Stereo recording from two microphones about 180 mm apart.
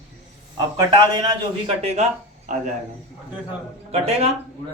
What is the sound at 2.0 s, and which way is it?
Speech, 40° right (ahead or behind).